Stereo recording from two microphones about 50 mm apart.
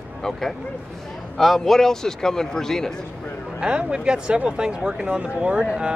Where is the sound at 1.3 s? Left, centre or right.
Centre.